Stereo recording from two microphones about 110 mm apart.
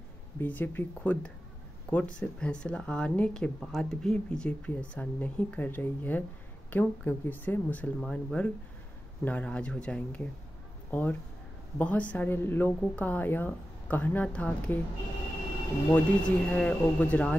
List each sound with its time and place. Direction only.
0.4 s speech: 15° left (ahead or behind)
15.9 s speech: 10° left (ahead or behind)